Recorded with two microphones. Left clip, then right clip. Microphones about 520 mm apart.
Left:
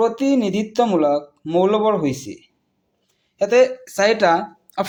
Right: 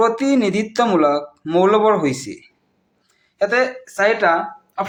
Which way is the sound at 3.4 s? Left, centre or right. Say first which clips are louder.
Left 3 dB; left.